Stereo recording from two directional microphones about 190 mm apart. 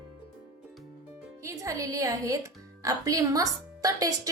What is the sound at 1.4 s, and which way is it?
Speech, 15° right (ahead or behind).